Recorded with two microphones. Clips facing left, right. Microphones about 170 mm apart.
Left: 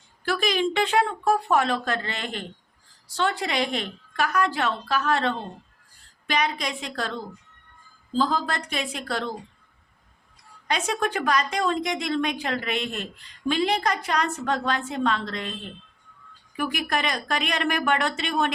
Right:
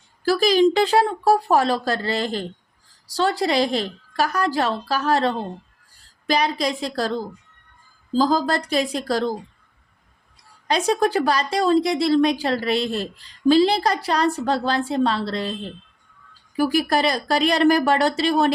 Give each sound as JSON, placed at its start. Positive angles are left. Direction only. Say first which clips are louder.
{"t": 0.3, "sound": "a woman's voice", "louder": "right 8 dB", "side_deg": -35}
{"t": 10.7, "sound": "a woman's voice", "louder": "right 7 dB", "side_deg": -35}